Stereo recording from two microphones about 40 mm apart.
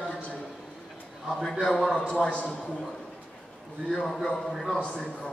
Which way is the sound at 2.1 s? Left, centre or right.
Left.